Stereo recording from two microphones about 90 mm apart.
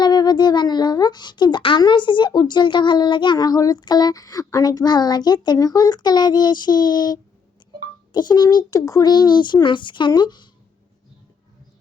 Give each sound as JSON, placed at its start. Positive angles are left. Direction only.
{"t": 0.0, "sound": "a child's voice", "side_deg": 50}